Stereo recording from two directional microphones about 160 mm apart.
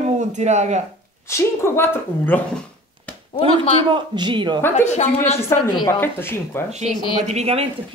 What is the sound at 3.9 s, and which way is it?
Speech, 30° right (ahead or behind).